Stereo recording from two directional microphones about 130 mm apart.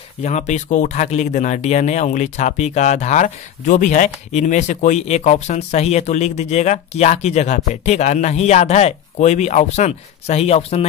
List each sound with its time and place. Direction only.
0.2 s speech: 60° left (ahead or behind)